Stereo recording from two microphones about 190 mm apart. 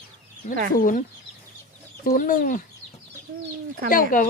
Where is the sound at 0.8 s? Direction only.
45° left (ahead or behind).